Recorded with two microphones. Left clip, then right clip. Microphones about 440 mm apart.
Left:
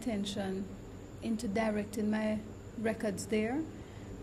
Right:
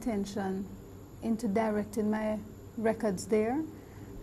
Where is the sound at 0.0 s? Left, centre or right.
Centre.